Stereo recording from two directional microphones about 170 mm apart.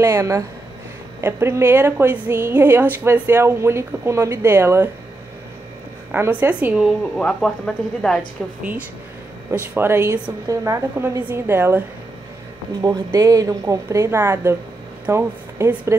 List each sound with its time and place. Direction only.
0.0 s a woman's voice: 20° right (ahead or behind)
6.1 s a woman's voice: 10° right (ahead or behind)
7.2 s speech: 5° left (ahead or behind)
9.5 s a woman's voice: 15° right (ahead or behind)
12.8 s a woman's voice: 20° right (ahead or behind)